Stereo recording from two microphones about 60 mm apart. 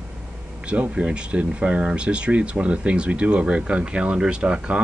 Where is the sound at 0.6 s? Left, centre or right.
Right.